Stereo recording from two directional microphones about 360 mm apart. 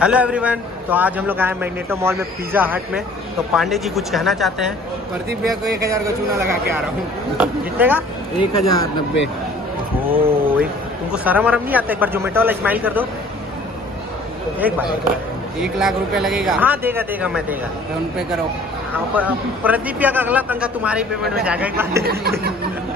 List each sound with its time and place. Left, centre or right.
0.0 s a man's voice: centre
7.3 s a man's voice: centre
8.4 s speech: centre
10.2 s a sound: centre
11.1 s a man's voice: centre
15.6 s a man's voice: centre
19.1 s a man's voice: centre
22.0 s a sound: right